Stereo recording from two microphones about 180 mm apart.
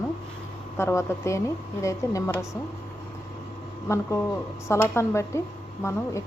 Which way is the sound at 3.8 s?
15° left (ahead or behind).